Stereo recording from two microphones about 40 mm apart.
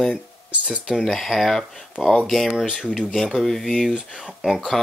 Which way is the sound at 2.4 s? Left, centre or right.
Centre.